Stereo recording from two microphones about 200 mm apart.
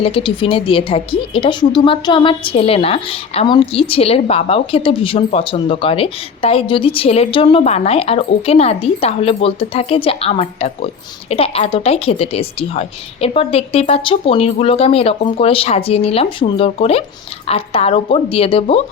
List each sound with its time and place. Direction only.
0.0 s speech: 25° left (ahead or behind)